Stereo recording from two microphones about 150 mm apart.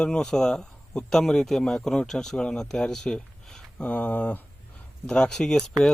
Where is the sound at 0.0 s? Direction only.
5° left (ahead or behind).